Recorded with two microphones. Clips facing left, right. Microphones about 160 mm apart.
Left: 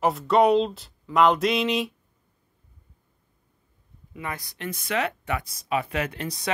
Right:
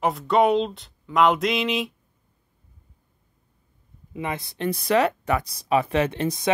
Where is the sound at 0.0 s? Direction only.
Centre (ahead or behind).